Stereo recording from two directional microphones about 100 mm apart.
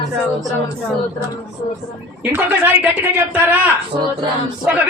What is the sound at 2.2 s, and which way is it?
Speech, 15° right (ahead or behind).